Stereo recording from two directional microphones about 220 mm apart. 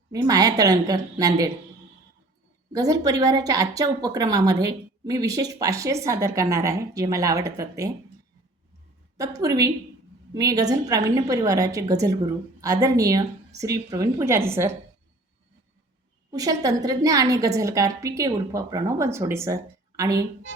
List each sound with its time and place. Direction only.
0.1 s a woman's voice: 15° right (ahead or behind)
2.7 s a woman's voice: 15° right (ahead or behind)
9.1 s a woman's voice: 15° right (ahead or behind)
16.3 s a woman's voice: 15° right (ahead or behind)